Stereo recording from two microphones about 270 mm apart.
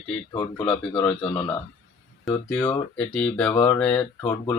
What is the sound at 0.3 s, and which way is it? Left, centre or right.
Speech, centre.